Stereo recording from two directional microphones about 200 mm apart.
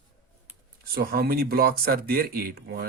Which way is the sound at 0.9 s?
50° right (ahead or behind).